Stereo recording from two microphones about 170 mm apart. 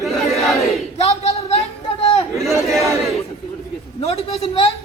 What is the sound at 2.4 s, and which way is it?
Chatter, centre (ahead or behind).